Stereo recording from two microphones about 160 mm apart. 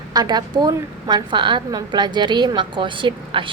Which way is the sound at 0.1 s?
25° right (ahead or behind).